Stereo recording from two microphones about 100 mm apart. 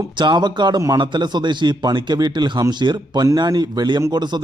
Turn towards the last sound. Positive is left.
turn(degrees=-45)  # may be behind; listen again after turning